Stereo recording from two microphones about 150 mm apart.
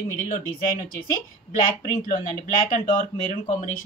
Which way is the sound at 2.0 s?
60° left (ahead or behind).